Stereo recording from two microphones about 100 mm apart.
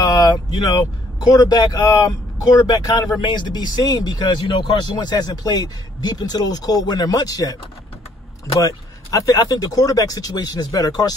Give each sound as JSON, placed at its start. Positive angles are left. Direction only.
{"t": 0.0, "sound": "speech", "side_deg": 45}
{"t": 8.5, "sound": "speech", "side_deg": 35}